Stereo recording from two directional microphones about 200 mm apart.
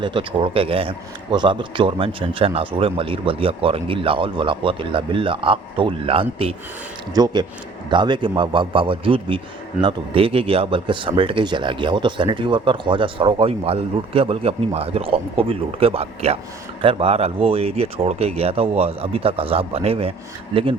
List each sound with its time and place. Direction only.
0.0 s speech: 25° right (ahead or behind)